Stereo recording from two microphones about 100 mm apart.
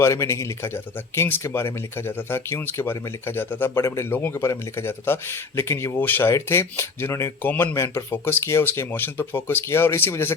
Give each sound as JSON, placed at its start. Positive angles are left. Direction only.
{"t": 0.0, "sound": "speech", "side_deg": 30}